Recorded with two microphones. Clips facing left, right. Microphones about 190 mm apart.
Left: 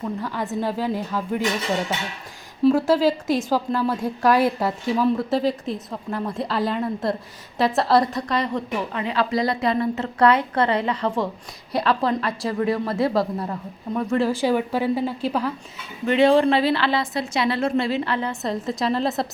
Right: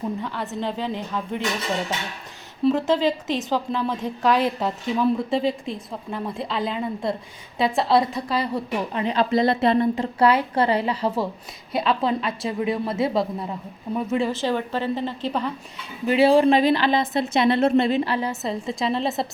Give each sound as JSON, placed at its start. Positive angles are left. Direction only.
{"t": 0.2, "sound": "a woman's voice", "side_deg": 10}
{"t": 2.6, "sound": "a woman's voice", "side_deg": 5}
{"t": 8.9, "sound": "speech", "side_deg": -20}
{"t": 9.9, "sound": "a woman's voice", "side_deg": -10}
{"t": 12.5, "sound": "speech", "side_deg": -20}
{"t": 13.0, "sound": "a woman's voice", "side_deg": 0}
{"t": 13.5, "sound": "a woman's voice", "side_deg": -10}
{"t": 14.2, "sound": "a woman's voice", "side_deg": 10}
{"t": 16.0, "sound": "a woman's voice", "side_deg": -10}
{"t": 18.4, "sound": "a woman's voice", "side_deg": 0}